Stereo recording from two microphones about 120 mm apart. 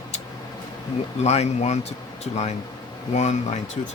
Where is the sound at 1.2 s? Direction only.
65° left (ahead or behind).